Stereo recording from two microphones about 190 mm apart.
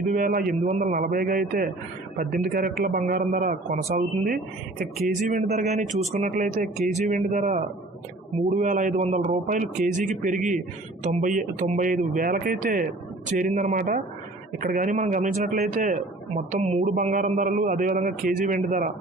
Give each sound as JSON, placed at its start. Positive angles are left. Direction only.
{"t": 0.1, "sound": "a man's voice", "side_deg": -45}